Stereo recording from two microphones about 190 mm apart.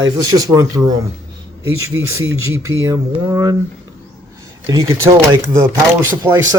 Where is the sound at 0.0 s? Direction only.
20° right (ahead or behind).